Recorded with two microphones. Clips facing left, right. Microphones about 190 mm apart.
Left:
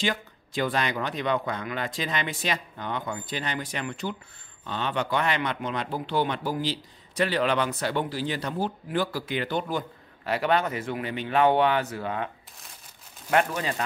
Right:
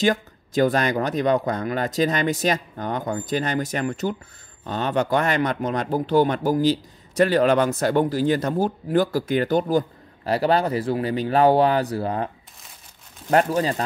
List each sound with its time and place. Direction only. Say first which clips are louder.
0.0 s speech: right 8 dB; 45° right (ahead or behind)
13.6 s speech: right 7 dB; 35° right (ahead or behind)